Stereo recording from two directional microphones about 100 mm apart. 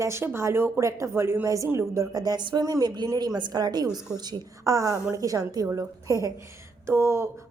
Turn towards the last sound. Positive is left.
turn(degrees=-25)  # may be behind; listen again after turning